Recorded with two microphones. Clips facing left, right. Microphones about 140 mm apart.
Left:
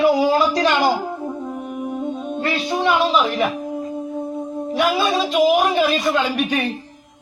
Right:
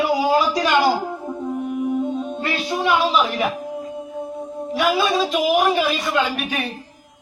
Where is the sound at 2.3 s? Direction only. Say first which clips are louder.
Left 2 dB; centre (ahead or behind).